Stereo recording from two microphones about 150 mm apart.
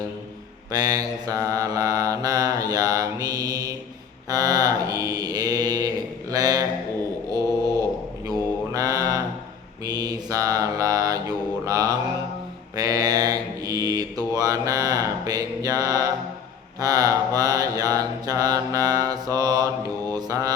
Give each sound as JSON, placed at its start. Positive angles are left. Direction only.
{"t": 0.7, "sound": "mantra", "side_deg": -25}
{"t": 8.3, "sound": "mantra", "side_deg": -25}